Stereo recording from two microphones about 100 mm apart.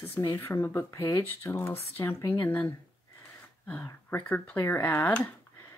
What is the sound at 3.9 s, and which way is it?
Speech, 20° left (ahead or behind).